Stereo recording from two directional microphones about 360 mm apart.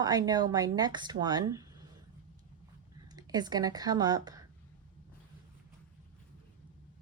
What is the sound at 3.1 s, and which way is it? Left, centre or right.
Speech, centre.